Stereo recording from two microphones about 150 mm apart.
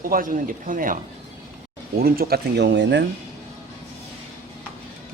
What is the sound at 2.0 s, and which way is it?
Speech, 85° right.